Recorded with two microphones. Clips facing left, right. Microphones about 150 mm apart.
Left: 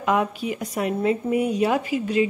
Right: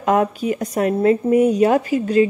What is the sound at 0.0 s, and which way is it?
Speech, 45° right (ahead or behind).